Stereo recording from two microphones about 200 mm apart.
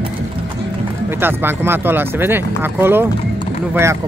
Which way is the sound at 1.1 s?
10° right (ahead or behind).